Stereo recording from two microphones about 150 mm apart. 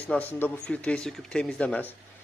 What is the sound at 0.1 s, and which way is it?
Speech, 10° left (ahead or behind).